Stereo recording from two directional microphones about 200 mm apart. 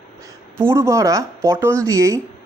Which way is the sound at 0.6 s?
15° right (ahead or behind).